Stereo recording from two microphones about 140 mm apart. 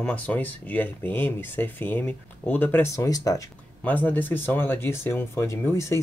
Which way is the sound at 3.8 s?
10° left (ahead or behind).